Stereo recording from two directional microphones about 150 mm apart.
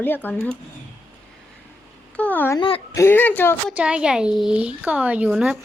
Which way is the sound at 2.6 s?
40° left (ahead or behind).